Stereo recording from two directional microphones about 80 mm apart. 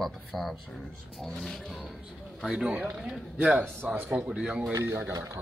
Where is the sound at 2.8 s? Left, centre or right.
Centre.